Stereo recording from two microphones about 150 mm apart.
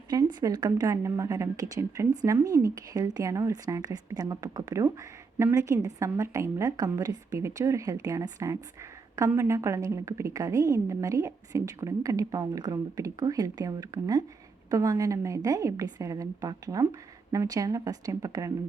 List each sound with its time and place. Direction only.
0.1 s speech: 25° right (ahead or behind)